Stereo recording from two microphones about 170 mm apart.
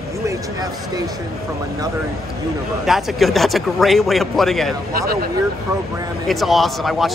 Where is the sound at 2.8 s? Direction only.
Centre (ahead or behind).